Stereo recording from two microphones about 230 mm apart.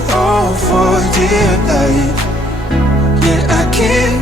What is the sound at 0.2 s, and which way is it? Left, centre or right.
Music, centre.